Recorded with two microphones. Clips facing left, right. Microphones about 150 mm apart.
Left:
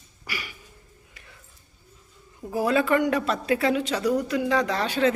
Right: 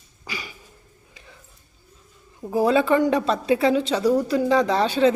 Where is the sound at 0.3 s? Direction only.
25° right (ahead or behind).